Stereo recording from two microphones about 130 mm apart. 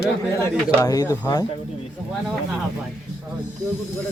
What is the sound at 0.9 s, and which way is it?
Speech, 25° left (ahead or behind).